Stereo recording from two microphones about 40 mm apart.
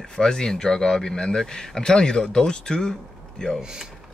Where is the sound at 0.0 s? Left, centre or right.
Centre.